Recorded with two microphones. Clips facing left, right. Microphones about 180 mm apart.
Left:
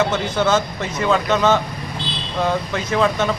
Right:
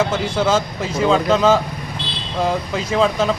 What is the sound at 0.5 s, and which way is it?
Speech, 30° right (ahead or behind).